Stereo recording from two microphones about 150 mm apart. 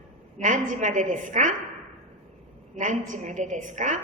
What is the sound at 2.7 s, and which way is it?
A woman's voice, 55° right (ahead or behind).